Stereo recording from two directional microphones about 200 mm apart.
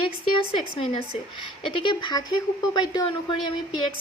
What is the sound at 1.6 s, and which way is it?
A woman's voice, 25° left (ahead or behind).